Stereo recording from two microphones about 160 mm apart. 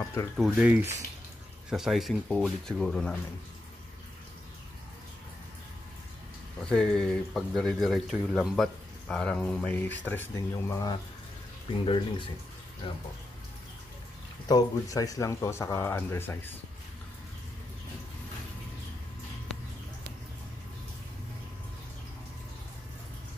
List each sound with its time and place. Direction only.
0.4 s speech: 10° right (ahead or behind)
6.7 s speech: 5° left (ahead or behind); by 11.0 s 25° left (ahead or behind)
11.8 s speech: 35° left (ahead or behind)
14.5 s speech: 20° left (ahead or behind)